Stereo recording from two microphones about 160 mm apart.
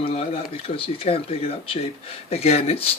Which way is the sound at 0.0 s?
35° left (ahead or behind).